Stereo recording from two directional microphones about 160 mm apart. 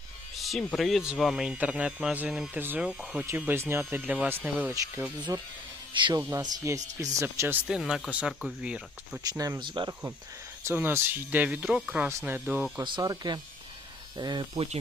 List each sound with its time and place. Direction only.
0.3 s music: centre (ahead or behind)
0.8 s speech: centre (ahead or behind)
5.3 s speech: 20° right (ahead or behind)
6.3 s speech: 20° right (ahead or behind)
9.4 s speech: 25° right (ahead or behind)
10.6 s speech: 15° right (ahead or behind)
12.8 s speech: 25° right (ahead or behind)